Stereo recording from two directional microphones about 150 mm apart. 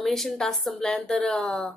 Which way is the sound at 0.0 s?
Centre (ahead or behind).